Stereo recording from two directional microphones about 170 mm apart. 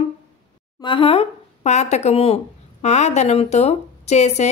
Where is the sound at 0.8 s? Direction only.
30° left (ahead or behind).